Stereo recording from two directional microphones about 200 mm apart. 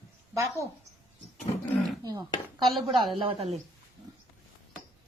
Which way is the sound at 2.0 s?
20° right (ahead or behind).